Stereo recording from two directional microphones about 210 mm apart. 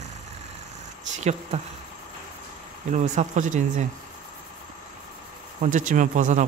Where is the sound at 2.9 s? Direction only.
35° right (ahead or behind).